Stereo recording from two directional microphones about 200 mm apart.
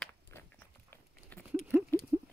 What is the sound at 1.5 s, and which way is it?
Patter, 10° right (ahead or behind).